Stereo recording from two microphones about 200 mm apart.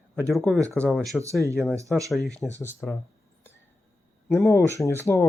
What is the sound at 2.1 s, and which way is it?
Speech, centre (ahead or behind).